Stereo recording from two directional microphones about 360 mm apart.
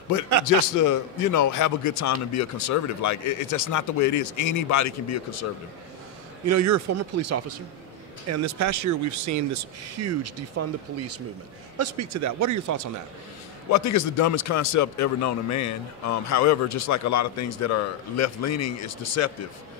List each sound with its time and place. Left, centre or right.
0.7 s a man's voice: left
6.4 s speech: right
11.8 s speech: right
13.7 s a man's voice: left